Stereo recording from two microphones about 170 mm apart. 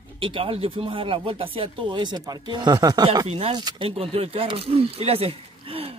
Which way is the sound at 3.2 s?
35° right (ahead or behind).